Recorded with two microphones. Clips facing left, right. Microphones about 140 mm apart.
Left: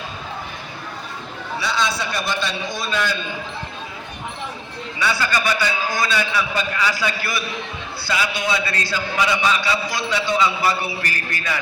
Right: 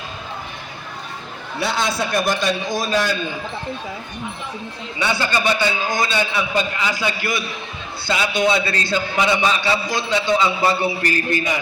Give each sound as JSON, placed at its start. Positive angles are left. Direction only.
{"t": 1.5, "sound": "a man's voice", "side_deg": -50}
{"t": 4.9, "sound": "a man's voice", "side_deg": -25}